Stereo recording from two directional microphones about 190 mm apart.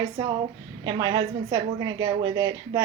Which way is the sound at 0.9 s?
20° right (ahead or behind).